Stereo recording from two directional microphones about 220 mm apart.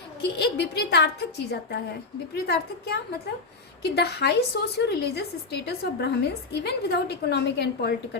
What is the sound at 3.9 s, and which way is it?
A woman's voice, 50° left (ahead or behind).